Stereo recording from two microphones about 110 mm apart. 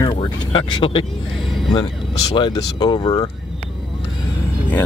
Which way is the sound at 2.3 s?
40° left (ahead or behind).